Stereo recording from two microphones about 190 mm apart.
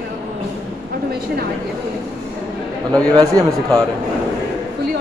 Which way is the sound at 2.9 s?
20° right (ahead or behind).